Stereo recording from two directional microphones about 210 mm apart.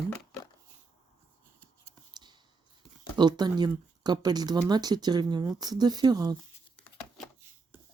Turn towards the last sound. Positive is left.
turn(degrees=-20)  # may be behind; listen again after turning